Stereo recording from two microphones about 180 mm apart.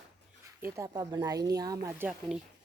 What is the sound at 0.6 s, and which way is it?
Speech, 20° right (ahead or behind).